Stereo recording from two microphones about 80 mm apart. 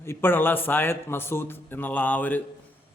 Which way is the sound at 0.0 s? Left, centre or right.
Left.